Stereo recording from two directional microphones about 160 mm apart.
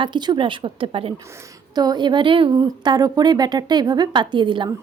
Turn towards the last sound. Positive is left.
turn(degrees=-30)  # may be behind; listen again after turning